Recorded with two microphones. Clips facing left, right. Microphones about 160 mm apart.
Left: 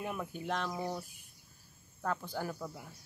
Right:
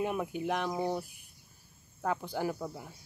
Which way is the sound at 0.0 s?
20° right (ahead or behind).